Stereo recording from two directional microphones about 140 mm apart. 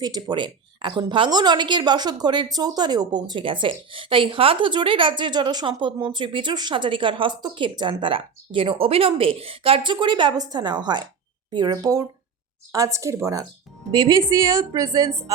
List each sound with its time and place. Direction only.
0.0 s a woman's voice: 30° right (ahead or behind)